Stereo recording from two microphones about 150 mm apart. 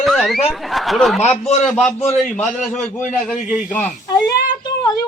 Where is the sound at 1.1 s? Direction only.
50° left (ahead or behind).